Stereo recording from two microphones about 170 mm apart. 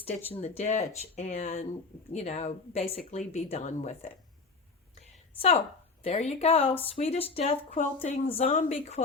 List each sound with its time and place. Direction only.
0.3 s a woman's voice: 40° left (ahead or behind)
5.4 s a woman's voice: 35° left (ahead or behind)